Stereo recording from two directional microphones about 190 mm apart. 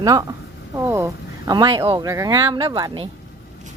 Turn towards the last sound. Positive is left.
turn(degrees=-25)  # may be behind; listen again after turning